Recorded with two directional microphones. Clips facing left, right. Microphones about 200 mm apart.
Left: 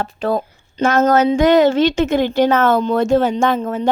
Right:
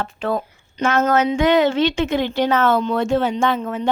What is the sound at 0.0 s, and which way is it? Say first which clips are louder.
Speech: left 3 dB; 40° left (ahead or behind).